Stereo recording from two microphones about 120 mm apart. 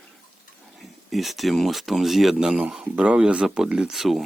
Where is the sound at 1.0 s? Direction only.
Centre (ahead or behind).